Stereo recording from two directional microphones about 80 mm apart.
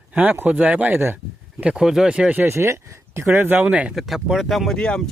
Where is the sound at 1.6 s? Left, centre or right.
Centre.